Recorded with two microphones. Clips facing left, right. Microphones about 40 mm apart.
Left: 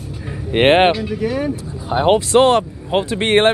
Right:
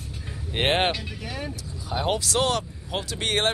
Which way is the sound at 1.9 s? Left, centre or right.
Left.